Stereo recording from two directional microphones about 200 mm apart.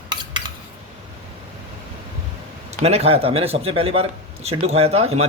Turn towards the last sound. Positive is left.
turn(degrees=-30)  # may be behind; listen again after turning